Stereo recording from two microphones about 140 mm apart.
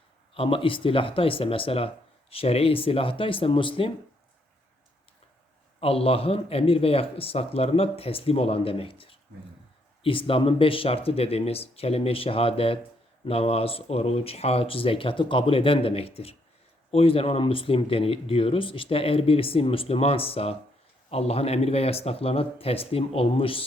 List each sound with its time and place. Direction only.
0.3 s speech: 40° left (ahead or behind)
5.8 s speech: 45° left (ahead or behind)